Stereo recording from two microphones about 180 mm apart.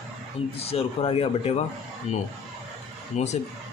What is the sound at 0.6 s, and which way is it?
Speech, 35° left (ahead or behind).